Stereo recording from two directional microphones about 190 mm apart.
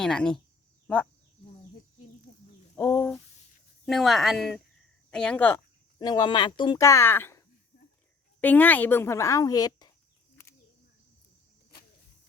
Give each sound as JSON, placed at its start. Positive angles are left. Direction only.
{"t": 0.0, "sound": "speech", "side_deg": 5}
{"t": 2.3, "sound": "a sound", "side_deg": 45}
{"t": 2.7, "sound": "speech", "side_deg": 10}
{"t": 3.8, "sound": "speech", "side_deg": 0}
{"t": 6.0, "sound": "speech", "side_deg": 20}